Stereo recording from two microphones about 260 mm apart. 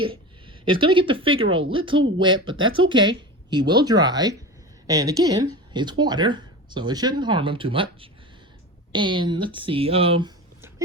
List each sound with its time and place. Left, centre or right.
0.0 s a woman's voice: centre
2.6 s speech: right
2.9 s speech: centre